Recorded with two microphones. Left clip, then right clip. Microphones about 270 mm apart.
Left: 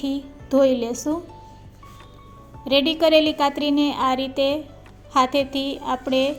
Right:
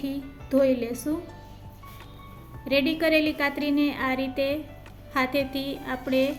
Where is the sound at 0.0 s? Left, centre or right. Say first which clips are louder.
Left 5 dB; centre.